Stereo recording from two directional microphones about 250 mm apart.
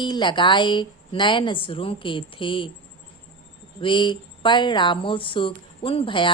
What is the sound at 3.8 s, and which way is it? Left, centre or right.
A woman's voice, centre.